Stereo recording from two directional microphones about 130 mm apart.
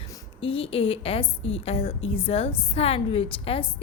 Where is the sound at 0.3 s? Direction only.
45° left (ahead or behind).